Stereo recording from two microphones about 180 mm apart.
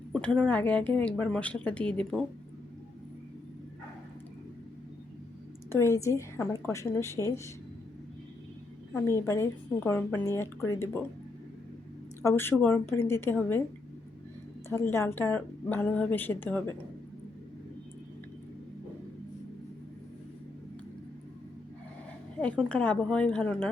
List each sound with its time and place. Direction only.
0.1 s a woman's voice: 5° left (ahead or behind)
5.7 s a woman's voice: 15° left (ahead or behind)
8.9 s a woman's voice: 15° left (ahead or behind)
12.2 s a woman's voice: 10° left (ahead or behind)
14.7 s a woman's voice: 15° left (ahead or behind)
22.7 s a woman's voice: 5° left (ahead or behind)